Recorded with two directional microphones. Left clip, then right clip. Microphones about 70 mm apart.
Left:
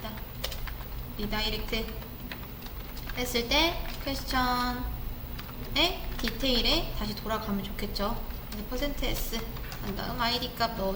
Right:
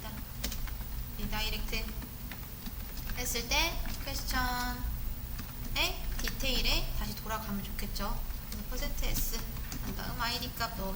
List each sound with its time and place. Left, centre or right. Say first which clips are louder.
1.3 s a woman's voice: left 5 dB; right
3.2 s a woman's voice: left 6 dB; right
5.7 s a woman's voice: left 6 dB; right